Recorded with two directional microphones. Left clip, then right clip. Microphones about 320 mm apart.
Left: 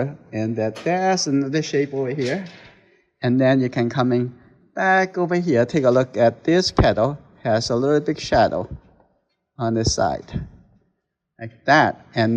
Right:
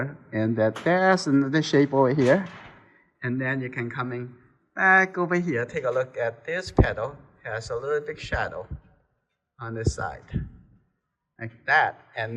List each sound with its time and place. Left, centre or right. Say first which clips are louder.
0.0 s speech: left 3 dB; centre
11.3 s a man's voice: left 5 dB; centre